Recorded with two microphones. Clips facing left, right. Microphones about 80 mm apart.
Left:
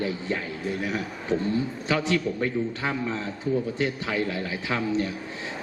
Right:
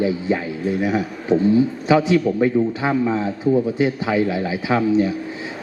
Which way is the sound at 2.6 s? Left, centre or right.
Right.